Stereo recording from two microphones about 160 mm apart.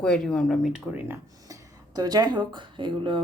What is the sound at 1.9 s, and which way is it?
A woman's voice, 25° right (ahead or behind).